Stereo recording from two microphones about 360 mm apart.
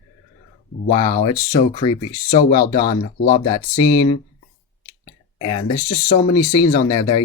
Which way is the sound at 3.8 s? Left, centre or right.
Centre.